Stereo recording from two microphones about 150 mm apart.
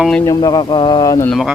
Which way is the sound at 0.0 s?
5° left (ahead or behind).